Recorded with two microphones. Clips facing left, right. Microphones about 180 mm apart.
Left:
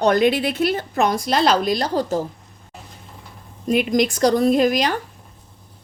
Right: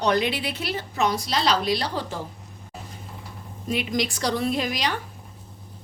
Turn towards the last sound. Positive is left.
turn(degrees=50)  # may be behind; listen again after turning